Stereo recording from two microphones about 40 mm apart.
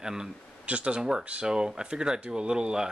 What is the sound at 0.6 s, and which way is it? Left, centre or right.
Speech, right.